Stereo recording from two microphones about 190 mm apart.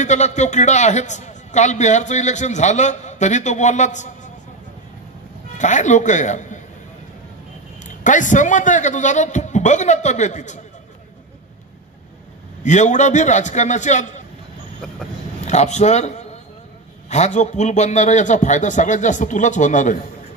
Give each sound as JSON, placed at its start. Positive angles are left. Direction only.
{"t": 0.0, "sound": "a man's voice", "side_deg": 40}
{"t": 5.6, "sound": "a man's voice", "side_deg": 40}
{"t": 7.8, "sound": "a man's voice", "side_deg": 40}
{"t": 12.6, "sound": "a man's voice", "side_deg": 40}
{"t": 15.4, "sound": "a man's voice", "side_deg": 35}